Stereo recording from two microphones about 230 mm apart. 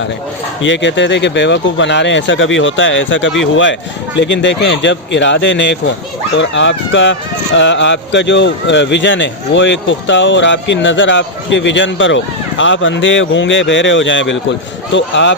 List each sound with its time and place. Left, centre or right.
0.6 s speech: left